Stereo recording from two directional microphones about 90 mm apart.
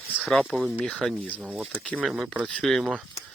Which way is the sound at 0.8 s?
10° left (ahead or behind).